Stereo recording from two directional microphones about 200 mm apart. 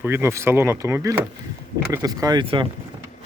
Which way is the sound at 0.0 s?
10° right (ahead or behind).